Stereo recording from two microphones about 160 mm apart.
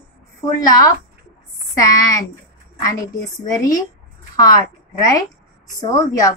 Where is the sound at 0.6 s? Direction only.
20° left (ahead or behind).